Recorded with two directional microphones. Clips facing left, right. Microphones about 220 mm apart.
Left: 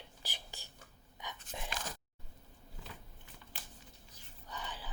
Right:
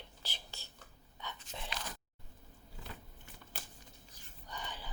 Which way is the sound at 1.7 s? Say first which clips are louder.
Left 1 dB; 50° left (ahead or behind).